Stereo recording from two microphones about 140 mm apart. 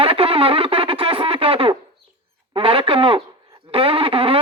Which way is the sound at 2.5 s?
40° right (ahead or behind).